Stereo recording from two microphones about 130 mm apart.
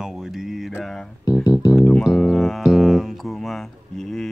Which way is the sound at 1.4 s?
25° left (ahead or behind).